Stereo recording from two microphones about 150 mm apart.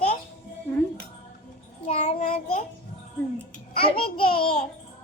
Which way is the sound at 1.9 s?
45° left (ahead or behind).